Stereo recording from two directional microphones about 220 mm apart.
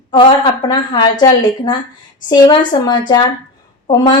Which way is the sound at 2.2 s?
20° left (ahead or behind).